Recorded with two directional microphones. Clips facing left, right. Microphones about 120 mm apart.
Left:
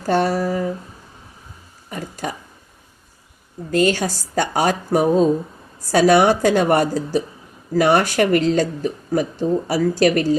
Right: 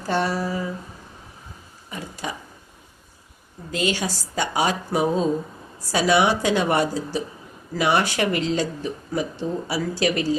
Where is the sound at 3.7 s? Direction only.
45° left (ahead or behind).